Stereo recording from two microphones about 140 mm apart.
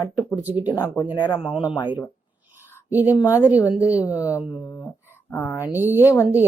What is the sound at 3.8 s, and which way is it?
A woman's voice, 20° left (ahead or behind).